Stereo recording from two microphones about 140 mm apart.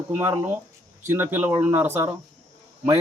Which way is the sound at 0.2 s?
15° right (ahead or behind).